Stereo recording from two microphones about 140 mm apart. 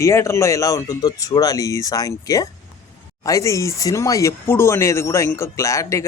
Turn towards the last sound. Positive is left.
turn(degrees=20)  # may be behind; listen again after turning